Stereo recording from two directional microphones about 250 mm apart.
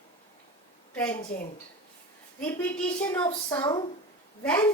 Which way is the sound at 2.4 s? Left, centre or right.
Centre.